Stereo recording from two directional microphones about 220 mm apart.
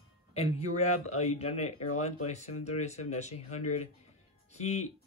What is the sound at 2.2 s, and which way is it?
A man's voice, 30° left (ahead or behind).